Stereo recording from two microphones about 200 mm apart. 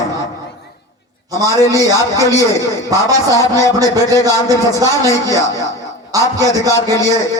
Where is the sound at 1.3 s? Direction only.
15° right (ahead or behind).